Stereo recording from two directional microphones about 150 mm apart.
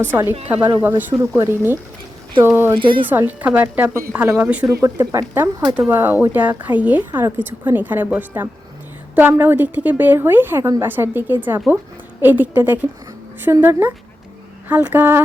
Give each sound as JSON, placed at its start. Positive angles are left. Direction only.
{"t": 0.0, "sound": "a woman's voice", "side_deg": -15}
{"t": 2.8, "sound": "a woman's voice", "side_deg": -35}
{"t": 3.1, "sound": "a woman's voice", "side_deg": -10}